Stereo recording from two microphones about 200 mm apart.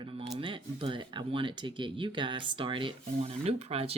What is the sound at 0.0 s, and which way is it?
Speech, 25° right (ahead or behind).